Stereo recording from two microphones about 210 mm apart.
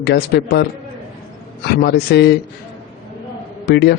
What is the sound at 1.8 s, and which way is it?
Speech, 50° left (ahead or behind).